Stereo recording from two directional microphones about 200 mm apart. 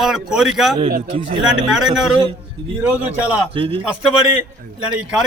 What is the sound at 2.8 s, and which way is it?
Speech, 5° right (ahead or behind).